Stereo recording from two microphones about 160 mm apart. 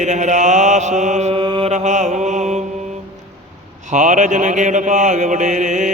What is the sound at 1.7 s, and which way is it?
Mantra, 50° right (ahead or behind).